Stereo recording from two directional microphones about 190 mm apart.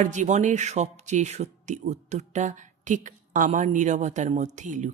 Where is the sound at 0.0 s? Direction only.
40° right (ahead or behind).